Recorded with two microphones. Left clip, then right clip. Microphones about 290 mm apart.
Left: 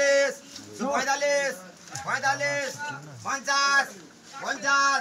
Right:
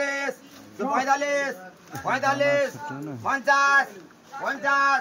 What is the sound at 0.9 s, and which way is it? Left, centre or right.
Speech, centre.